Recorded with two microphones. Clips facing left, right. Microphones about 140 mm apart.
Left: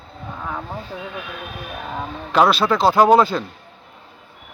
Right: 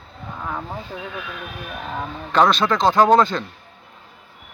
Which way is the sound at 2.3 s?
5° left (ahead or behind).